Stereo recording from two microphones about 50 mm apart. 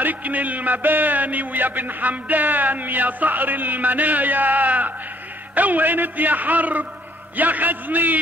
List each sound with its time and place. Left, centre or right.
0.0 s a man's voice: right